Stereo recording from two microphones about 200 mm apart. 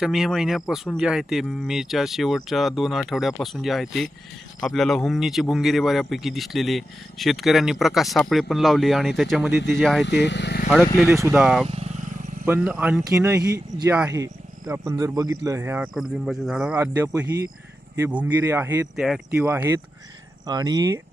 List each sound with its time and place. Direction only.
0.0 s speech: centre (ahead or behind)
10.2 s speech: 60° left (ahead or behind)
11.1 s speech: 15° right (ahead or behind)
11.3 s speech: centre (ahead or behind)
11.7 s vehicle: 35° right (ahead or behind)
12.5 s speech: 5° right (ahead or behind)